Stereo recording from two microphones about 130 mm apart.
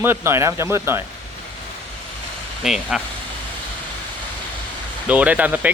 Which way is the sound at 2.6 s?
5° right (ahead or behind).